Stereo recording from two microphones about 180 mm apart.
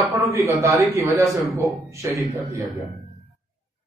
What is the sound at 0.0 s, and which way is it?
A man's voice, 15° right (ahead or behind).